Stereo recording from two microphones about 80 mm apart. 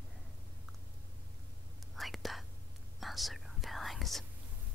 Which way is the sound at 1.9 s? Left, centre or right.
Centre.